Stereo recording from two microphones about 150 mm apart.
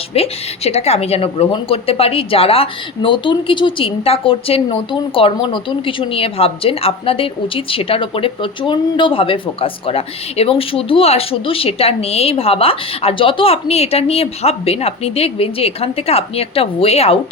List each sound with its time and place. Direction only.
0.1 s a woman's voice: 40° left (ahead or behind)